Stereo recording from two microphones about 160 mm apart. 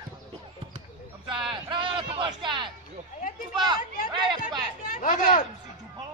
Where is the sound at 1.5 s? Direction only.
30° right (ahead or behind).